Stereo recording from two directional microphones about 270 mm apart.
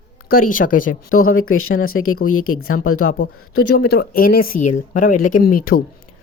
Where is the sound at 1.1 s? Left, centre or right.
Left.